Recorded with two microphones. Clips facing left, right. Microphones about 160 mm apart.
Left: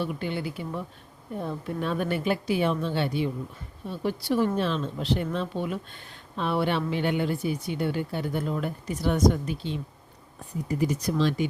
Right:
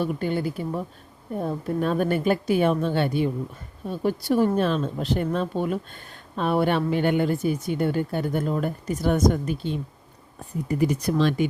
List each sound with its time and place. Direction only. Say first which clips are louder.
0.0 s speech: right 5 dB; 45° right (ahead or behind)
10.7 s speech: right 4 dB; 60° right (ahead or behind)